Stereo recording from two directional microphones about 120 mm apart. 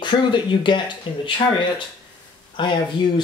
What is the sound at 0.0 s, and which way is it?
Speech, 40° left (ahead or behind).